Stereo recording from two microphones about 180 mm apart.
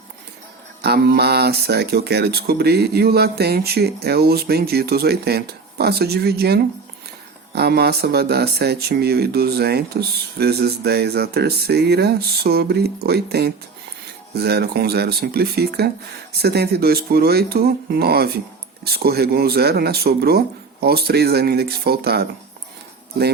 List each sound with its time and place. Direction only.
0.8 s speech: 65° right (ahead or behind)